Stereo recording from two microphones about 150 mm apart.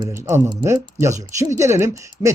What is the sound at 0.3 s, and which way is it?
Speech, 15° right (ahead or behind).